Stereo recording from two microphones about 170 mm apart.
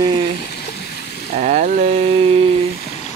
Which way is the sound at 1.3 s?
45° right (ahead or behind).